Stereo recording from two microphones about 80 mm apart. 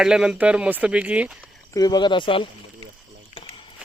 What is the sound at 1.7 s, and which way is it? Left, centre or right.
Speech, left.